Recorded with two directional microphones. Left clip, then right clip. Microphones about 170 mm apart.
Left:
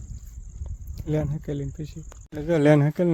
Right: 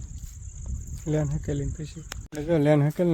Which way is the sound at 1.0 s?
15° left (ahead or behind).